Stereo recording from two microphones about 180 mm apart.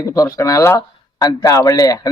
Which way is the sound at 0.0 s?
20° left (ahead or behind).